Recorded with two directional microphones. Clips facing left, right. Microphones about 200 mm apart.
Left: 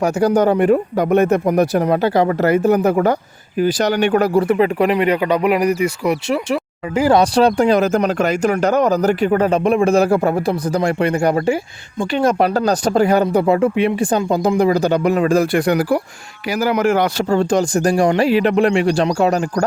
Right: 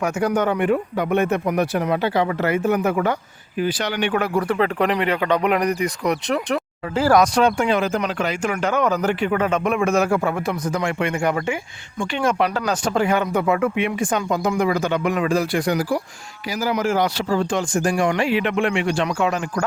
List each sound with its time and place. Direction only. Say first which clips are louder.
0.0 s speech: left 6 dB; 35° left (ahead or behind)
4.4 s speech: left 5 dB; 15° left (ahead or behind)
7.0 s speech: left 3 dB; 30° left (ahead or behind)
15.5 s speech: left 5 dB; 60° left (ahead or behind)
17.2 s speech: left 6 dB; 45° left (ahead or behind)